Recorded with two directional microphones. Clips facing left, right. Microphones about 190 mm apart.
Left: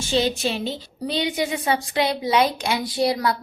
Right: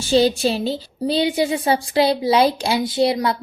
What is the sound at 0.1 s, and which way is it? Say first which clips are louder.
A woman's voice: right 6 dB; 35° right (ahead or behind).